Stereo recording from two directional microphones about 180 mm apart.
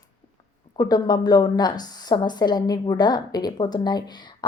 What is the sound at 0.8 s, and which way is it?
A woman's voice, 20° left (ahead or behind).